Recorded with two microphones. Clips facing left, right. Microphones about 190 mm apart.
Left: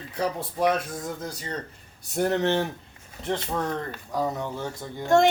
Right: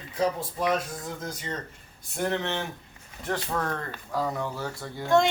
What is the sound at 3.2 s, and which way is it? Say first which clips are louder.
Speech: left 2 dB; 20° left (ahead or behind).